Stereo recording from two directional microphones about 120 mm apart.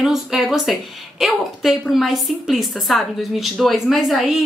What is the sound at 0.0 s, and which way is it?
A woman's voice, 5° right (ahead or behind).